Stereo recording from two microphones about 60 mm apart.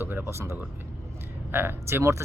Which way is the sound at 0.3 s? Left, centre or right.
Right.